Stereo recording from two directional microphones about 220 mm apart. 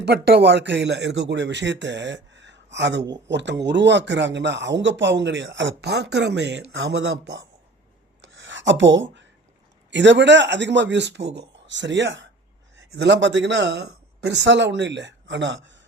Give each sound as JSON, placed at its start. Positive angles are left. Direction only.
{"t": 0.0, "sound": "a man's voice", "side_deg": -50}
{"t": 8.2, "sound": "rub", "side_deg": -60}
{"t": 9.9, "sound": "a man's voice", "side_deg": -55}